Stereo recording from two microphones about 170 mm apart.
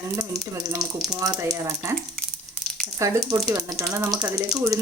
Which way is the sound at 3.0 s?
20° right (ahead or behind).